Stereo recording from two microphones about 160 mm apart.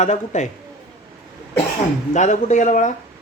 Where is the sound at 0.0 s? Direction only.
45° left (ahead or behind).